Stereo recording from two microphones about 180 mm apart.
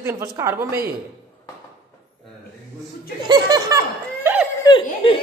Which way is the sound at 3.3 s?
20° right (ahead or behind).